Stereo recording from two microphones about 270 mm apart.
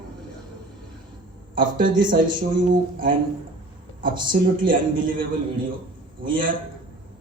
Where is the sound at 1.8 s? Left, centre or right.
Right.